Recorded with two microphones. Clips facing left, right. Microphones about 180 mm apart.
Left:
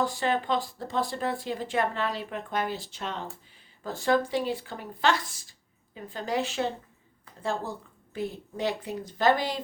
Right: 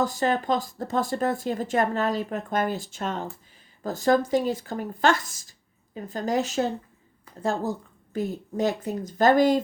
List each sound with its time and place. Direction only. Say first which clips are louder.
0.0 s speech: right 3 dB; 45° right (ahead or behind)